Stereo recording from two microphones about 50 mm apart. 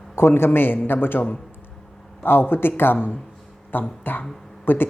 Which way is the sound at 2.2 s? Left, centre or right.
Left.